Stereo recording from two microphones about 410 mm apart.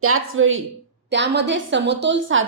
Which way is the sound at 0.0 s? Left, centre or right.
Right.